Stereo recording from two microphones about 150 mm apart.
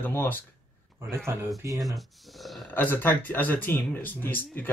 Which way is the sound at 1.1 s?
15° right (ahead or behind).